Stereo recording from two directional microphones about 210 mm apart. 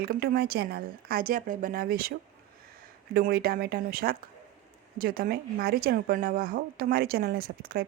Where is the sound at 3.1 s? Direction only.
45° right (ahead or behind).